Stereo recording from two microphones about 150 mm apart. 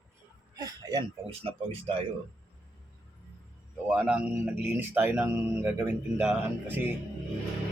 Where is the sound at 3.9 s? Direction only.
10° right (ahead or behind).